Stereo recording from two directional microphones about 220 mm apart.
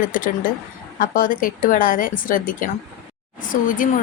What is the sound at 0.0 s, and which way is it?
A woman's voice, 40° left (ahead or behind).